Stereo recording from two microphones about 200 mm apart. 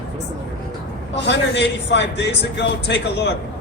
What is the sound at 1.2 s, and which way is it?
A man's voice, 60° left (ahead or behind).